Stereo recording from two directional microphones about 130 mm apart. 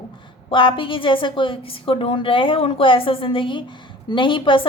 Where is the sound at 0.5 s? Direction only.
40° left (ahead or behind).